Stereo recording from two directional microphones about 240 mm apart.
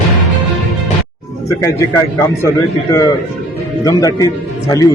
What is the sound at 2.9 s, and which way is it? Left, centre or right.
Speech, centre.